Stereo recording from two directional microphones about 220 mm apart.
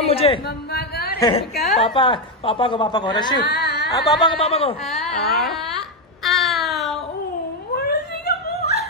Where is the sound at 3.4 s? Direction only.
50° left (ahead or behind).